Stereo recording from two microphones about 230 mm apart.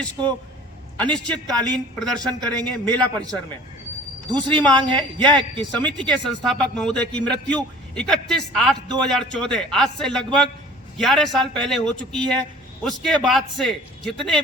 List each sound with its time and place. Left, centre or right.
1.1 s a man's voice: centre
4.3 s speech: centre
6.1 s a man's voice: centre